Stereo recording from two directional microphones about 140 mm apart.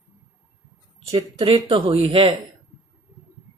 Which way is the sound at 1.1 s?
35° right (ahead or behind).